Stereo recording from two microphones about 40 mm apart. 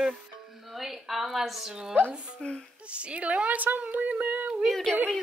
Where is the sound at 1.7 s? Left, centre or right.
Centre.